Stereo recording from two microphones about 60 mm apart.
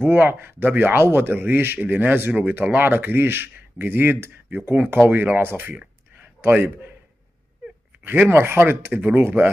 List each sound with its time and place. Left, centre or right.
0.0 s speech: right
6.1 s a sound: right
8.3 s speech: right